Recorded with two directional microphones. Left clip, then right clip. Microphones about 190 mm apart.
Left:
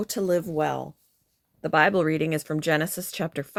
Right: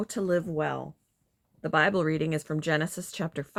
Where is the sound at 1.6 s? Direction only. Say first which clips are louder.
Left 4 dB; 35° left (ahead or behind).